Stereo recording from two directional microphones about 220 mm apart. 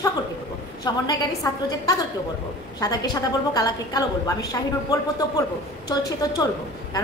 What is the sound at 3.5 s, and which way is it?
A woman's voice, 15° left (ahead or behind).